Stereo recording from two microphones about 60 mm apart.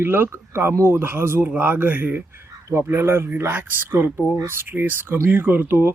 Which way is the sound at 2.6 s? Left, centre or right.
Right.